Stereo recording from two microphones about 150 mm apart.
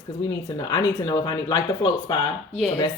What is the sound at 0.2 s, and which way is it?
Speech, 25° left (ahead or behind).